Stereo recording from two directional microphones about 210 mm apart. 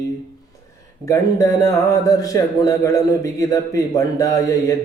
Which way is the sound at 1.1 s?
15° left (ahead or behind).